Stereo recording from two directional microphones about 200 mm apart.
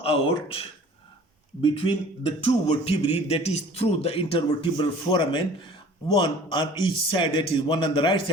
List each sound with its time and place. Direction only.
0.0 s speech: 30° left (ahead or behind)
1.6 s speech: 30° left (ahead or behind)